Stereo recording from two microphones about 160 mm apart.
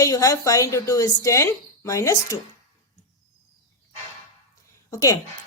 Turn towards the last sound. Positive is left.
turn(degrees=20)  # may be behind; listen again after turning